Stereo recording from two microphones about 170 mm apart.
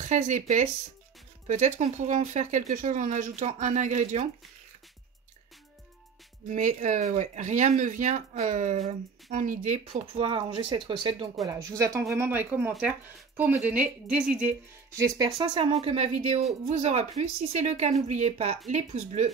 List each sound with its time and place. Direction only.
0.0 s speech: 45° right (ahead or behind)
6.5 s a woman's voice: 45° right (ahead or behind); by 11.2 s 30° right (ahead or behind)
11.4 s speech: 20° right (ahead or behind)
15.0 s a woman's voice: 20° right (ahead or behind); by 19.3 s 40° right (ahead or behind)